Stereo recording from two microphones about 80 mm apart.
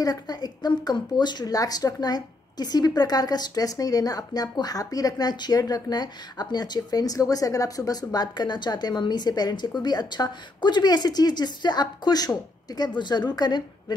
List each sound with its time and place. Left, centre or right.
0.0 s speech: left